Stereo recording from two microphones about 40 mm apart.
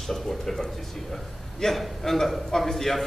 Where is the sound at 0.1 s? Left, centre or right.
Centre.